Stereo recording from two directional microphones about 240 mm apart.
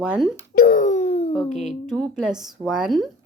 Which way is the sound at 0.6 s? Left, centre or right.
Left.